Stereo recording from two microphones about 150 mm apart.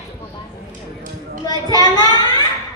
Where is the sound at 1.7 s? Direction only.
25° left (ahead or behind).